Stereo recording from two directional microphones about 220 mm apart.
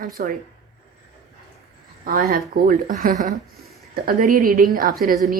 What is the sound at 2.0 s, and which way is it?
Speech, 40° right (ahead or behind).